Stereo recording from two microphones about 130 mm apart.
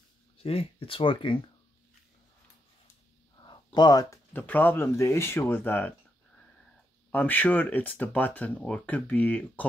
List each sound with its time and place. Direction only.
0.4 s speech: 50° left (ahead or behind)
3.3 s a sound: 35° left (ahead or behind)
4.3 s speech: 15° left (ahead or behind)